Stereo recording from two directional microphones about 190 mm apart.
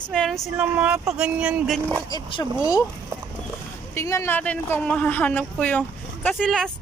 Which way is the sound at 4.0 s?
15° left (ahead or behind).